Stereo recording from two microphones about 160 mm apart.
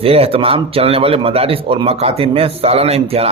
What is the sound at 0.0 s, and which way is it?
A man's voice, 35° right (ahead or behind).